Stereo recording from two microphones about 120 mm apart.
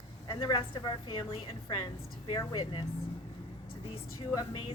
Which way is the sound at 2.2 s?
35° left (ahead or behind).